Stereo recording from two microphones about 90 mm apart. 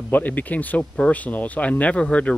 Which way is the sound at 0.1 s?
20° left (ahead or behind).